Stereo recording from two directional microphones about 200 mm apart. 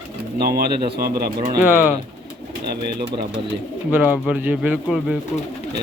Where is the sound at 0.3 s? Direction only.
50° right (ahead or behind).